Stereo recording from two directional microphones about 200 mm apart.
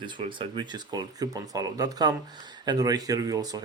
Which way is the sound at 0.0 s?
25° right (ahead or behind).